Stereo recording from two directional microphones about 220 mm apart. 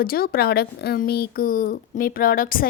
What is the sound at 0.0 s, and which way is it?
Speech, 40° left (ahead or behind).